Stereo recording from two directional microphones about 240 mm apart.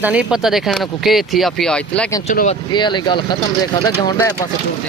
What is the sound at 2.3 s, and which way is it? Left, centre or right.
Speech, left.